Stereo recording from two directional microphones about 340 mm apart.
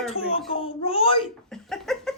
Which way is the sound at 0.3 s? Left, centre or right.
Centre.